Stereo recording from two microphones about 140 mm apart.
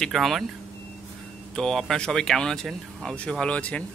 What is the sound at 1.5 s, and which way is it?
Speech, 5° left (ahead or behind).